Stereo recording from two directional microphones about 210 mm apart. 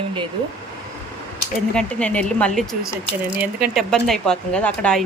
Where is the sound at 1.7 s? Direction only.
5° left (ahead or behind).